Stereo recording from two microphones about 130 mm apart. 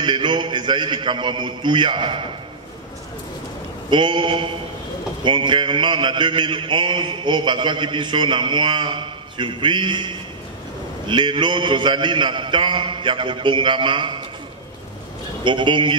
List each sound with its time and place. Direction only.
0.0 s mantra: 35° right (ahead or behind)
3.9 s mantra: 35° right (ahead or behind)
15.4 s mantra: 40° right (ahead or behind)